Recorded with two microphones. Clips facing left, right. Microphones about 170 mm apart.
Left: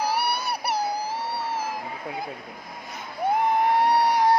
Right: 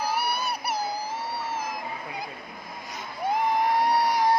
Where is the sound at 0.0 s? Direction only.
70° left (ahead or behind).